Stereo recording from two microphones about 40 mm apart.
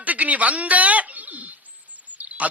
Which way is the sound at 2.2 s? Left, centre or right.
Right.